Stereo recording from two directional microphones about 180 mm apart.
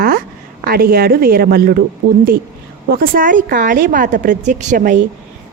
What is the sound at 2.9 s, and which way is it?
A woman's voice, 50° right (ahead or behind).